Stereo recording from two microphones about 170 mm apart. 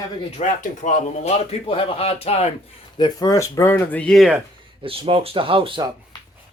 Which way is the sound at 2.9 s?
20° left (ahead or behind).